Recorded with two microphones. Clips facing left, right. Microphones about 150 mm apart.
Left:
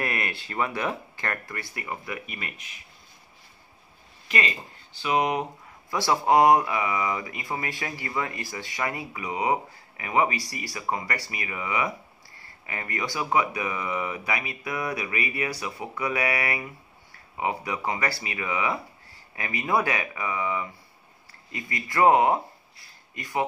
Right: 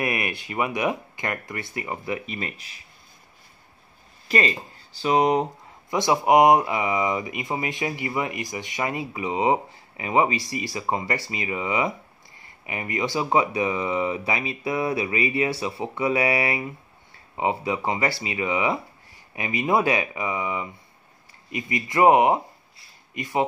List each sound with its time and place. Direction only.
0.0 s speech: 15° right (ahead or behind); by 2.8 s 35° right (ahead or behind)
4.3 s speech: 35° right (ahead or behind)
5.9 s speech: 20° right (ahead or behind)